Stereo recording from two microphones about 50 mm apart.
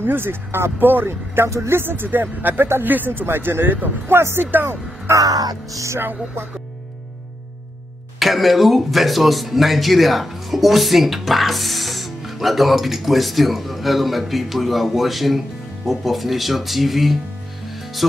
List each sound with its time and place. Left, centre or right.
0.0 s a man's voice: right
4.2 s speech: right
5.9 s speech: right
8.2 s speech: centre